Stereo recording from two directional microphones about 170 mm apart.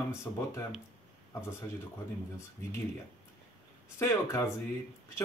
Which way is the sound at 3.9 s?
15° left (ahead or behind).